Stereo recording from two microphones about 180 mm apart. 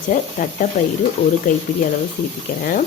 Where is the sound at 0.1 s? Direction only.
45° left (ahead or behind).